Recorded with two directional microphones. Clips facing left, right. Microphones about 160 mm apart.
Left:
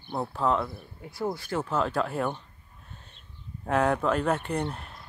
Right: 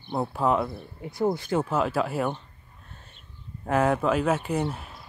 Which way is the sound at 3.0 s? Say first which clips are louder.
Right 1 dB; centre (ahead or behind).